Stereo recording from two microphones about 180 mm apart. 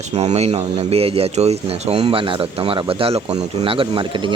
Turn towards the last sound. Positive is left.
turn(degrees=-25)  # may be behind; listen again after turning